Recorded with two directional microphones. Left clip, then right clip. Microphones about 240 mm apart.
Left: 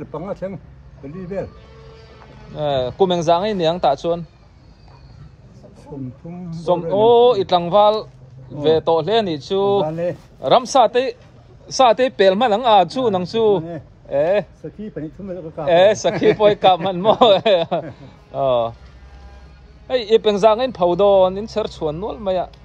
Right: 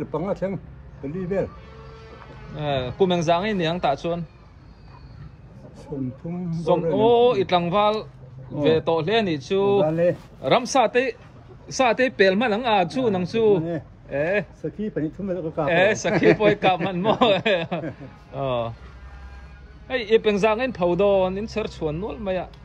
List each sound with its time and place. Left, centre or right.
0.0 s speech: centre
2.6 s speech: centre
6.2 s speech: centre
15.6 s speech: centre
18.3 s speech: left
19.9 s speech: centre
21.8 s speech: left
22.2 s speech: centre